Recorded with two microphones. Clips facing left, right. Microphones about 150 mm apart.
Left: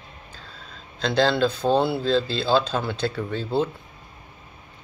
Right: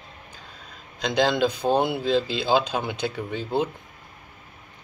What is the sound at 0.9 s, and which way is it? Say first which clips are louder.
Speech: left 1 dB; 15° right (ahead or behind).